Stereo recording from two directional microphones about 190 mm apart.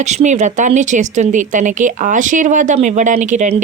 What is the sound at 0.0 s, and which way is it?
Speech, 35° right (ahead or behind).